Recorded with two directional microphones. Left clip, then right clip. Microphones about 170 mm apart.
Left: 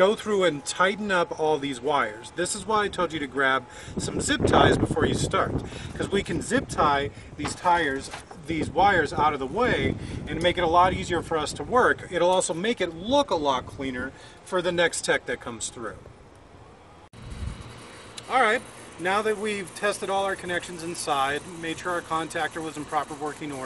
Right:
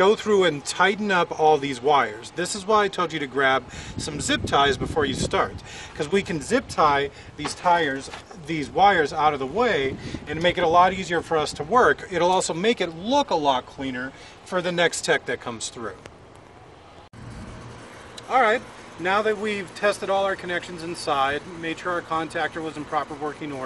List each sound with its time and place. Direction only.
0.0 s speech: 25° right (ahead or behind)
7.6 s speech: 25° right (ahead or behind)
8.5 s speech: 35° right (ahead or behind)
18.3 s speech: centre (ahead or behind)